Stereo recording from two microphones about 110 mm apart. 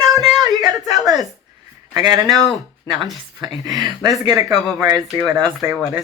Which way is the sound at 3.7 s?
40° right (ahead or behind).